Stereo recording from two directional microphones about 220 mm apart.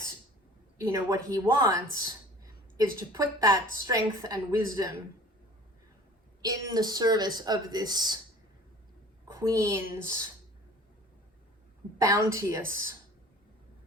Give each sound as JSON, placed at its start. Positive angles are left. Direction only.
{"t": 0.8, "sound": "speech", "side_deg": -15}
{"t": 6.4, "sound": "speech", "side_deg": -15}
{"t": 9.2, "sound": "speech", "side_deg": -15}
{"t": 11.9, "sound": "speech", "side_deg": -15}